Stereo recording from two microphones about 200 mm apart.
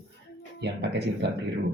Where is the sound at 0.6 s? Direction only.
60° right (ahead or behind).